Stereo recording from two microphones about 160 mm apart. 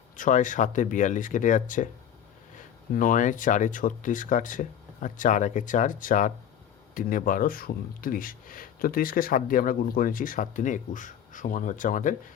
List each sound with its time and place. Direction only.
0.2 s speech: 50° left (ahead or behind)
2.9 s speech: 60° left (ahead or behind)